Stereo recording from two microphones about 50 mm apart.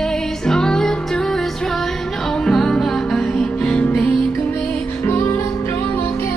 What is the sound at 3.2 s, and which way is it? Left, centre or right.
Music, centre.